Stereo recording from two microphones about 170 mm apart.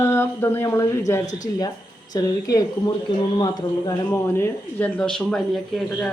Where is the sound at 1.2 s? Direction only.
50° left (ahead or behind).